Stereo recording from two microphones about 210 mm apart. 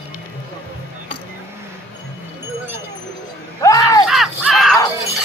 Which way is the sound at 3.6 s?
15° left (ahead or behind).